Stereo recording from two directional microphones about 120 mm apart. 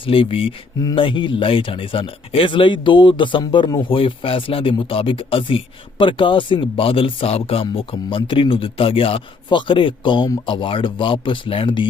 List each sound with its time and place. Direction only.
0.0 s speech: 45° left (ahead or behind)